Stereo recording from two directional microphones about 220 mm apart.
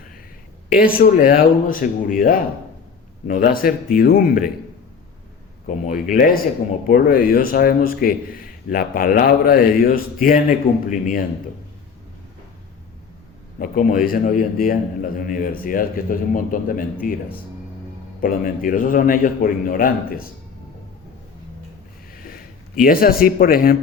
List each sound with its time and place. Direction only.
0.7 s a man's voice: 40° left (ahead or behind)
5.6 s a man's voice: 35° left (ahead or behind)
13.6 s a man's voice: 40° left (ahead or behind)
18.2 s a man's voice: 40° left (ahead or behind)
22.1 s sniff: 40° left (ahead or behind)
22.8 s a man's voice: 40° left (ahead or behind)